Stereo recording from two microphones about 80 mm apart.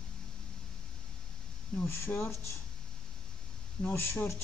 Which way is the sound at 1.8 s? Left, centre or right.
Left.